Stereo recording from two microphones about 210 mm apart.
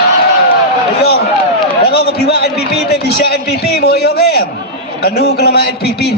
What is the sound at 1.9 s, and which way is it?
A man's voice, 50° left (ahead or behind).